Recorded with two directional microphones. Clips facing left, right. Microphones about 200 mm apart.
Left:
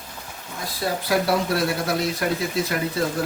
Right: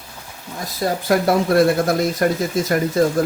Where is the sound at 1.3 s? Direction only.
50° right (ahead or behind).